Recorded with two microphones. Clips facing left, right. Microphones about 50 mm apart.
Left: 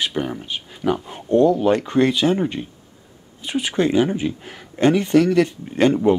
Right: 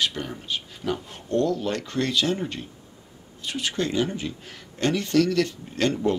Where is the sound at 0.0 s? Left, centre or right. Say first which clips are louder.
Left 4 dB; left.